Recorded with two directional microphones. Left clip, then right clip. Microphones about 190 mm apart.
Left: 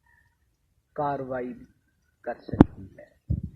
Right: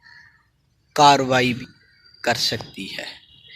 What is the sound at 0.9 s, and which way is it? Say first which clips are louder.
Speech: right 15 dB; 25° right (ahead or behind).